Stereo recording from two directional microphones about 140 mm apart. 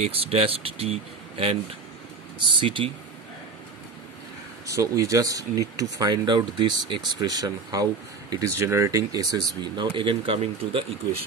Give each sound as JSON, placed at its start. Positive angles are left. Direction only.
{"t": 0.0, "sound": "speech", "side_deg": -45}
{"t": 4.7, "sound": "speech", "side_deg": -25}